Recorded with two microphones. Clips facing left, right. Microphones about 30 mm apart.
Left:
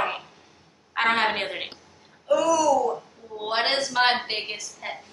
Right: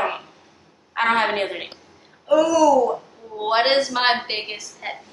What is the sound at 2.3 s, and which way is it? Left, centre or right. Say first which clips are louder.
A woman's voice: right 5 dB; centre.